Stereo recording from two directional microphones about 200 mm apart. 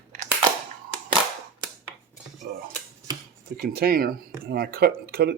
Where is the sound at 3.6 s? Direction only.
50° right (ahead or behind).